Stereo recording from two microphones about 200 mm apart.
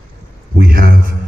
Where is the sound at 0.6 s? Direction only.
50° right (ahead or behind).